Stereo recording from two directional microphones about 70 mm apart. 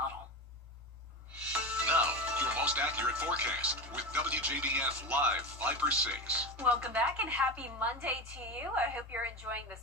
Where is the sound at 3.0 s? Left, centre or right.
Right.